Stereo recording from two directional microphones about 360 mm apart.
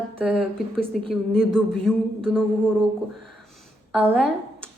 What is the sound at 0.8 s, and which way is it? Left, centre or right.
A woman's voice, centre.